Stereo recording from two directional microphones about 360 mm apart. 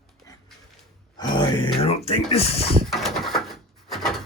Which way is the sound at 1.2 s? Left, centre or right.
Centre.